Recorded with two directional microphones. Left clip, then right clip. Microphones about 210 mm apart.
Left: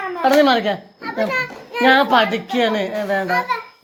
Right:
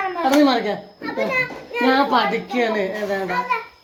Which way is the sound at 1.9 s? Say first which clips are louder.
Left 4 dB; 45° left (ahead or behind).